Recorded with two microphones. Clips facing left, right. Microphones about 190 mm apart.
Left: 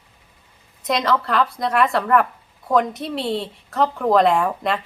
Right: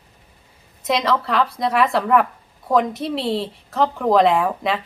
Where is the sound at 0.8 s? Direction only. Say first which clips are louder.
Right 1 dB; centre (ahead or behind).